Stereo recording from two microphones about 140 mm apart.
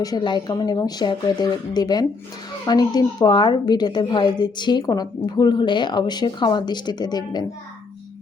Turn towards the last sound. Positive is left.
turn(degrees=30)  # may be behind; listen again after turning